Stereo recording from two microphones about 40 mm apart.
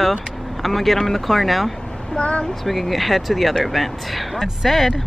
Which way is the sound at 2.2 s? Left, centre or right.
Left.